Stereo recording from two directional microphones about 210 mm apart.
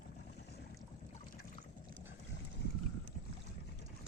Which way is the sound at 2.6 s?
55° left (ahead or behind).